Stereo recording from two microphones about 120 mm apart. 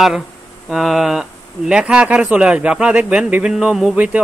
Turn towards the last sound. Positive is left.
turn(degrees=-10)  # may be behind; listen again after turning